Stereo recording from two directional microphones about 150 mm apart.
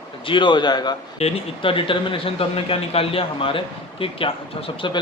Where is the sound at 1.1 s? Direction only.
40° left (ahead or behind).